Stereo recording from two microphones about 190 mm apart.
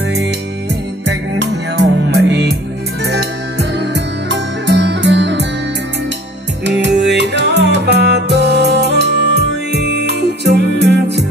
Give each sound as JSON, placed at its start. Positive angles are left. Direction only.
{"t": 1.0, "sound": "music", "side_deg": -60}
{"t": 6.6, "sound": "music", "side_deg": -65}